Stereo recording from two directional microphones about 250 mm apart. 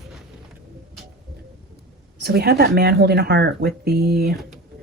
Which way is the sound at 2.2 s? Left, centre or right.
Right.